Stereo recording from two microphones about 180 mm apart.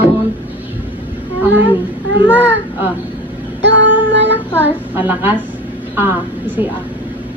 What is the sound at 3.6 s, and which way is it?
Child singing, 80° right.